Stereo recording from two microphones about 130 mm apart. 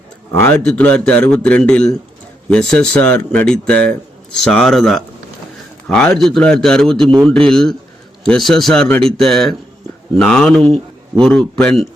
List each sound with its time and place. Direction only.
0.3 s a man's voice: 15° left (ahead or behind)